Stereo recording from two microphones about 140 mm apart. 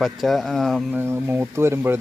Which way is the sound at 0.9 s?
15° right (ahead or behind).